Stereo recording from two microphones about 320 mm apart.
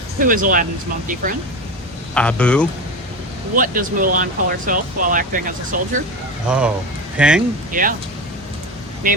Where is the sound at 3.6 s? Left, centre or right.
Right.